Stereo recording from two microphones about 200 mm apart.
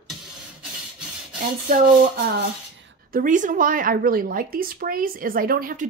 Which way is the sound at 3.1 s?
40° right (ahead or behind).